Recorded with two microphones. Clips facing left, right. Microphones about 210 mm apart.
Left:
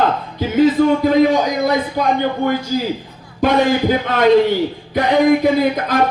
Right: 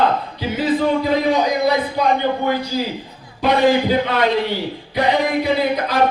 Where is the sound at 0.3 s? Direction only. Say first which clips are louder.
Left 6 dB; 45° left (ahead or behind).